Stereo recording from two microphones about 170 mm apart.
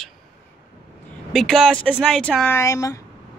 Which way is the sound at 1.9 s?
Centre (ahead or behind).